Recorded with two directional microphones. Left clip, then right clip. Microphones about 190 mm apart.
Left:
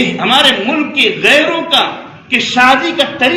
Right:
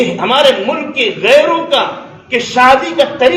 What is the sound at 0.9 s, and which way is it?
A man's voice, 25° right (ahead or behind).